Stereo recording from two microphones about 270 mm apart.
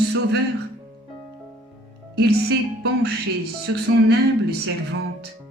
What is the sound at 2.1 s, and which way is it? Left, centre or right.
A woman's voice, right.